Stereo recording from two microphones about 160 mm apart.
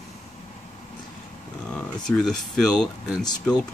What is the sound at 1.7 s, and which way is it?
Speech, 5° left (ahead or behind).